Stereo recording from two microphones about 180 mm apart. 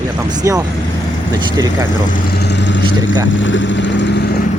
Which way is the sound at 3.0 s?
90° left.